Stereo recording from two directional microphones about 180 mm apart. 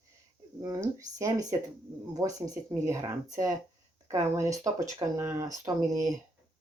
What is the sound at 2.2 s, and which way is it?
Speech, 20° right (ahead or behind).